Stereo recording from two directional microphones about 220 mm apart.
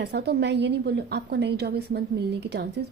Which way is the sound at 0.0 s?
50° right (ahead or behind).